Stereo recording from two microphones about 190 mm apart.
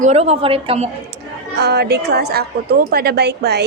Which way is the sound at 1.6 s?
60° right (ahead or behind).